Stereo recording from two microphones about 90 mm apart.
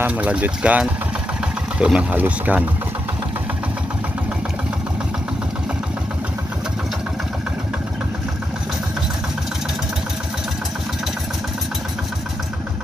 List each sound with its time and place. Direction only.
0.0 s speech: 15° right (ahead or behind)